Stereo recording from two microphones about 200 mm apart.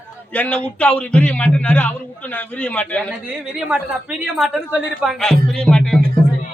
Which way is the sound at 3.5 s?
5° right (ahead or behind).